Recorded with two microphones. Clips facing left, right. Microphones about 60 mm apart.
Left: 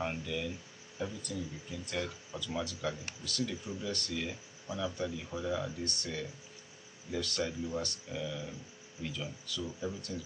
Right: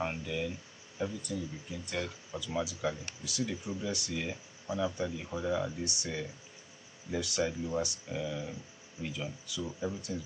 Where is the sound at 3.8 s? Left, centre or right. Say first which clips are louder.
Right 1 dB; centre.